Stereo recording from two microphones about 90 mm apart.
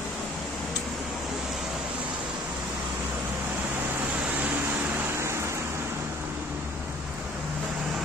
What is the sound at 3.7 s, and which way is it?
Vehicle, 20° right (ahead or behind).